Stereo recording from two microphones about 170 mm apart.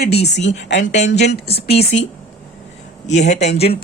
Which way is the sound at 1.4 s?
35° left (ahead or behind).